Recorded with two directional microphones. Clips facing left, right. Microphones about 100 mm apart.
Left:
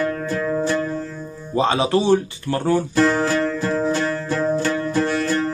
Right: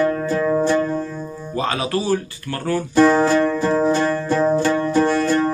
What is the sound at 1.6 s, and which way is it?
Speech, 25° left (ahead or behind).